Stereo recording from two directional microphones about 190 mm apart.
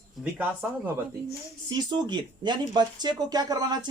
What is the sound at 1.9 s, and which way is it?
Speech, 25° right (ahead or behind).